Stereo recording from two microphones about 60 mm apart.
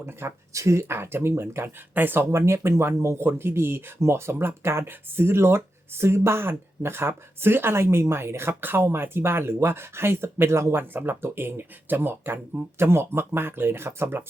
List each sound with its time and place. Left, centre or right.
0.0 s speech: right
2.3 s speech: right